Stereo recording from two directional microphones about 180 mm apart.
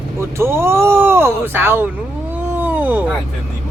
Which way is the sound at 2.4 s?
10° right (ahead or behind).